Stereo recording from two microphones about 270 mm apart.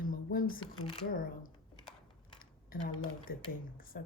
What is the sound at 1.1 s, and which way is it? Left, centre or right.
Speech, left.